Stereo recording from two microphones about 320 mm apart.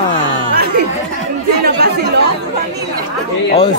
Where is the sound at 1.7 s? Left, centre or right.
Right.